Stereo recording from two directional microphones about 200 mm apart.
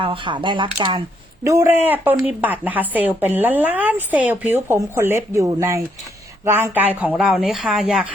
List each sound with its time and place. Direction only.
0.0 s speech: 25° right (ahead or behind)
1.5 s speech: 15° right (ahead or behind)